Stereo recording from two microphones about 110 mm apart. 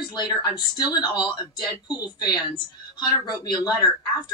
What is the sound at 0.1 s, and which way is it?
A woman's voice, 40° left (ahead or behind).